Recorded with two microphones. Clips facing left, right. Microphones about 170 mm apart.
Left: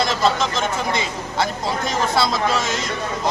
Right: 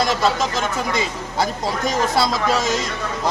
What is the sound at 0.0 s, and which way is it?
Speech, 40° right (ahead or behind).